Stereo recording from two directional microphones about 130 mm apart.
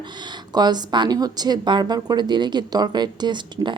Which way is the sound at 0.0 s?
35° right (ahead or behind).